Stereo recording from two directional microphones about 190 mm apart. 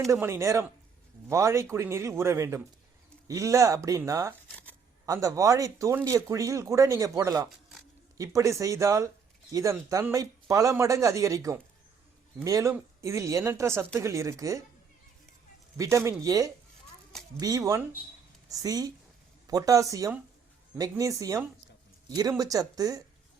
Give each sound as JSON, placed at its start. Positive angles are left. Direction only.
{"t": 0.1, "sound": "speech", "side_deg": -15}
{"t": 15.8, "sound": "speech", "side_deg": -15}